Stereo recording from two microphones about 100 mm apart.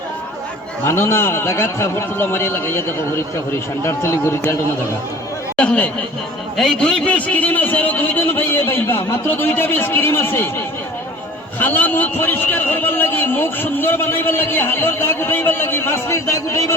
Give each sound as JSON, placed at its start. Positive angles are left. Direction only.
{"t": 0.9, "sound": "a man's voice", "side_deg": 25}
{"t": 5.5, "sound": "chatter", "side_deg": 10}
{"t": 6.6, "sound": "a man's voice", "side_deg": 5}
{"t": 11.6, "sound": "a man's voice", "side_deg": 20}